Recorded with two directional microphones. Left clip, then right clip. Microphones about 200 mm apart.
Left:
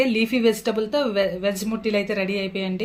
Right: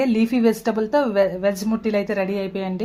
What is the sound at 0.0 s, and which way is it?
Speech, 40° right (ahead or behind).